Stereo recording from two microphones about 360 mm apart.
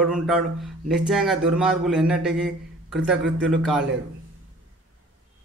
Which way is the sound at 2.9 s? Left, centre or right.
Centre.